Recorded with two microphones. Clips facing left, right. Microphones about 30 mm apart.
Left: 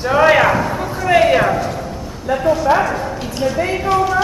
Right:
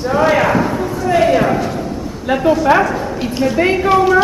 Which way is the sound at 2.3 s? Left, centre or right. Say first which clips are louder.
Right 2 dB; right.